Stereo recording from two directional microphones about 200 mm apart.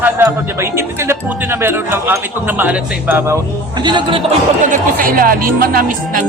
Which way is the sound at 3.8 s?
25° right (ahead or behind).